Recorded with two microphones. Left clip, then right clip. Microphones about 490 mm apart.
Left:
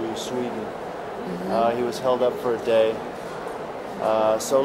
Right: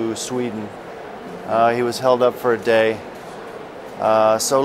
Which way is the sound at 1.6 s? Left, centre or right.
Right.